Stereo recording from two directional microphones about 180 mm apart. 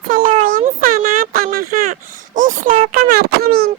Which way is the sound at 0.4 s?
50° right (ahead or behind).